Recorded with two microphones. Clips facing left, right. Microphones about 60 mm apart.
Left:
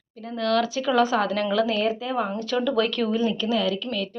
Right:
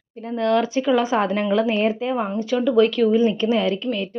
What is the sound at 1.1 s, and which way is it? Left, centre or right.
Speech, right.